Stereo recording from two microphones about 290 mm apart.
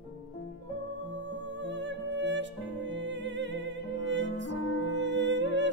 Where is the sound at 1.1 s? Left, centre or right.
Right.